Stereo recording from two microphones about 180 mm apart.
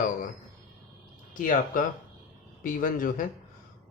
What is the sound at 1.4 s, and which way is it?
Speech, 50° left (ahead or behind).